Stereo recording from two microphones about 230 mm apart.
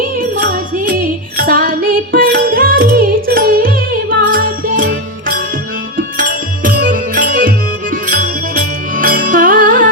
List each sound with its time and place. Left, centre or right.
0.2 s music: right